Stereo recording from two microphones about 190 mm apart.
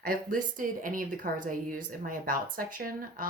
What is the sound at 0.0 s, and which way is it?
Speech, 45° right (ahead or behind).